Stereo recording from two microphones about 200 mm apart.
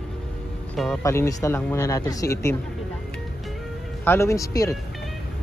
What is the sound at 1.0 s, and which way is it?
Speech, 15° left (ahead or behind).